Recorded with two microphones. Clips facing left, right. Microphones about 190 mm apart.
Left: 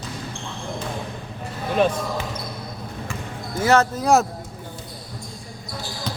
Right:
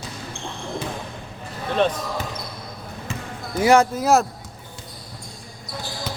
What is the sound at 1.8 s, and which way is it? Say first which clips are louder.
Speech: left 1 dB; 10° left (ahead or behind).